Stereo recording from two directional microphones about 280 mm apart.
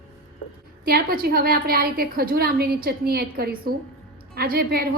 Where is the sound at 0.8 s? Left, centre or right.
Right.